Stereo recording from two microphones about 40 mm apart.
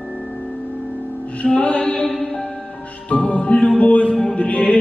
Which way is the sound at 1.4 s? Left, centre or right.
Left.